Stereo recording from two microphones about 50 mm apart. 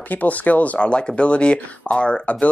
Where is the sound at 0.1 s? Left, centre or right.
Left.